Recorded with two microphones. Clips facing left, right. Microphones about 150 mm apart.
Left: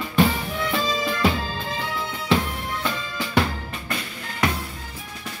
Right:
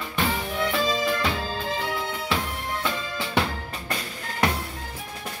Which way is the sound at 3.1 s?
25° right (ahead or behind).